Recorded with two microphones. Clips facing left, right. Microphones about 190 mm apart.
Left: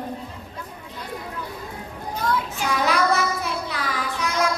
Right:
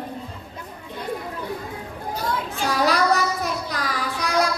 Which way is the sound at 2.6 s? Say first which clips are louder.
Right 2 dB; 35° right (ahead or behind).